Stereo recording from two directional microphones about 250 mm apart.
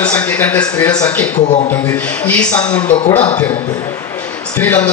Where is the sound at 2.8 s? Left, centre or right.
Left.